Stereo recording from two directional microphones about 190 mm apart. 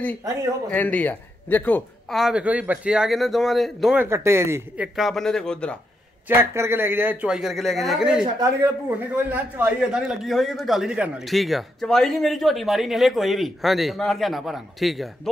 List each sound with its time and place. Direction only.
0.7 s a man's voice: 10° left (ahead or behind)
4.0 s speech: 15° right (ahead or behind)
4.9 s a man's voice: centre (ahead or behind)
6.2 s a man's voice: 15° right (ahead or behind)